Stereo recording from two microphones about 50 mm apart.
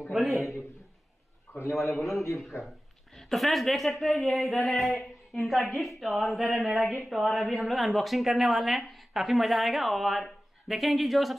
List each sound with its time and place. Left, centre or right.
0.0 s speech: centre
1.5 s a man's voice: left
2.3 s a man's voice: centre
3.2 s speech: centre